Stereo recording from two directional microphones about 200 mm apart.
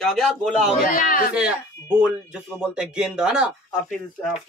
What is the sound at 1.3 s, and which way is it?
Speech, 5° right (ahead or behind).